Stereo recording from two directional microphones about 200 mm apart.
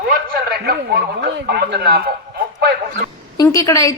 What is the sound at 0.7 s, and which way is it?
Speech, 50° right (ahead or behind).